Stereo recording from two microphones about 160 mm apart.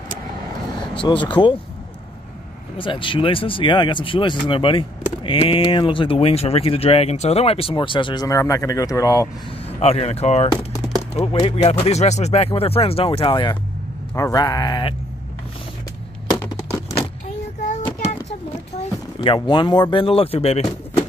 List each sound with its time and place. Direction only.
1.0 s speech: 30° left (ahead or behind)
2.8 s speech: 30° left (ahead or behind)
9.8 s speech: 40° left (ahead or behind)
18.8 s speech: 30° left (ahead or behind)